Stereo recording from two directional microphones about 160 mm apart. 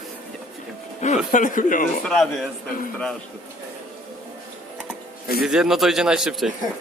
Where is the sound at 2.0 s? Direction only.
Centre (ahead or behind).